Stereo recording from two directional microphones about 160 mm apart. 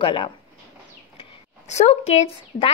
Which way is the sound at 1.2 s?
35° left (ahead or behind).